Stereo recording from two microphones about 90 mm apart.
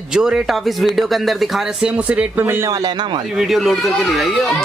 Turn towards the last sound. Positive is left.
turn(degrees=0)  # may be behind; listen again after turning